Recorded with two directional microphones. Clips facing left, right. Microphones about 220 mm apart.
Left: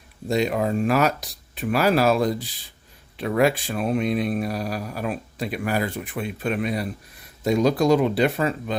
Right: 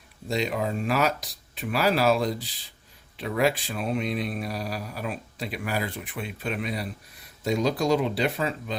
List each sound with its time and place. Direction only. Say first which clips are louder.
0.3 s speech: left 5 dB; 50° left (ahead or behind)